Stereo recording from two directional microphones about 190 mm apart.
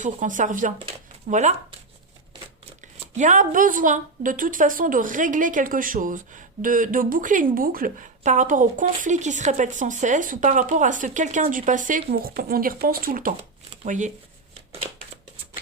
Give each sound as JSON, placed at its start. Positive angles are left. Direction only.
{"t": 0.0, "sound": "speech", "side_deg": -45}
{"t": 2.8, "sound": "speech", "side_deg": -40}